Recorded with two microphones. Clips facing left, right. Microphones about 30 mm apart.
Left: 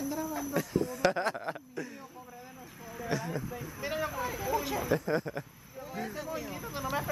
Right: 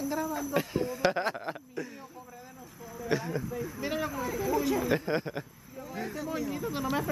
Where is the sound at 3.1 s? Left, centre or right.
Right.